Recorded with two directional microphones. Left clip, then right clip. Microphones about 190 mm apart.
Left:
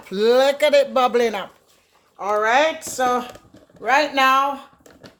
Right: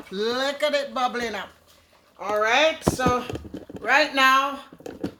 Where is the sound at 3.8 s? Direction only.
10° left (ahead or behind).